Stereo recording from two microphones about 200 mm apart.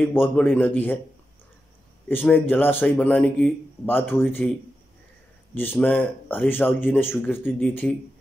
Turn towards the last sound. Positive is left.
turn(degrees=10)  # may be behind; listen again after turning